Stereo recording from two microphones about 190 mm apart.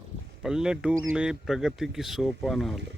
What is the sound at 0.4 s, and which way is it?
Speech, 5° right (ahead or behind).